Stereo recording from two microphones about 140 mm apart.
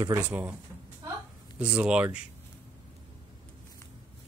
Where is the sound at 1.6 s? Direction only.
10° right (ahead or behind).